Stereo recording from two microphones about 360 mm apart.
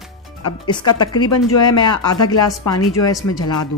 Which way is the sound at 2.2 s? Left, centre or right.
Left.